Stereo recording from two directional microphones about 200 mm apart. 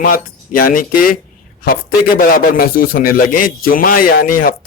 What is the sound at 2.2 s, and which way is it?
A man's voice, 45° left (ahead or behind).